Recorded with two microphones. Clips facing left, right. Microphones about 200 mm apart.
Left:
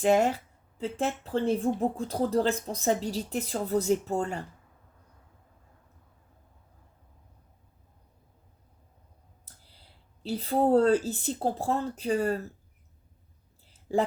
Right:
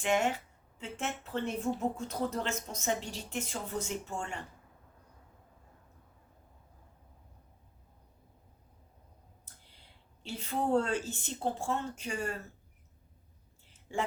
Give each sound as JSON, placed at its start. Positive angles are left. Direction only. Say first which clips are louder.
{"t": 0.0, "sound": "speech", "louder": "left 7 dB", "side_deg": 35}
{"t": 10.2, "sound": "speech", "louder": "left 8 dB", "side_deg": 35}
{"t": 13.7, "sound": "a sound", "louder": "left 10 dB", "side_deg": 35}